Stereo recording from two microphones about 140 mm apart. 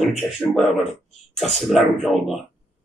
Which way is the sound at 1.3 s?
Centre (ahead or behind).